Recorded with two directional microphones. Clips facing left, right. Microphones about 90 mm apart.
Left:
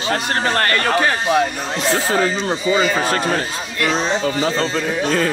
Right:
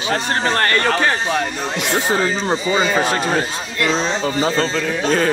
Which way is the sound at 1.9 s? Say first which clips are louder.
Even; 25° right (ahead or behind).